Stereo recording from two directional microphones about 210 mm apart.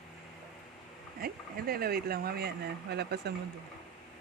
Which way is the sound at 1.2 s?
45° right (ahead or behind).